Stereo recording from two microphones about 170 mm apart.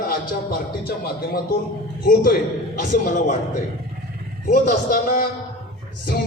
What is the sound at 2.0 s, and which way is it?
Speech, 60° left (ahead or behind).